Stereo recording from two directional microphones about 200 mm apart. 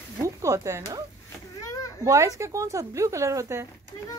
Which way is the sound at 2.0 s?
15° right (ahead or behind).